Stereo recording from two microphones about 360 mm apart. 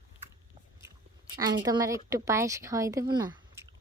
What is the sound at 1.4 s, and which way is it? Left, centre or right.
A woman's voice, centre.